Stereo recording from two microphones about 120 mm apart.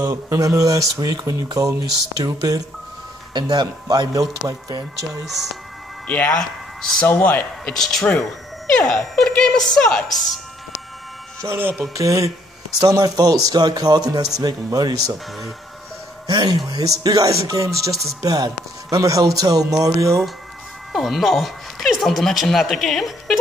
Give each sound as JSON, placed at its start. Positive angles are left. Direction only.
{"t": 0.0, "sound": "speech", "side_deg": -25}
{"t": 5.2, "sound": "a woman's voice", "side_deg": 0}
{"t": 6.0, "sound": "speech", "side_deg": 15}
{"t": 7.7, "sound": "a woman's voice", "side_deg": 5}
{"t": 11.4, "sound": "speech", "side_deg": -20}
{"t": 16.3, "sound": "speech", "side_deg": -35}
{"t": 20.9, "sound": "speech", "side_deg": 0}